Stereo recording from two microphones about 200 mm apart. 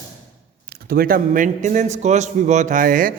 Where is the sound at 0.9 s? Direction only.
45° right (ahead or behind).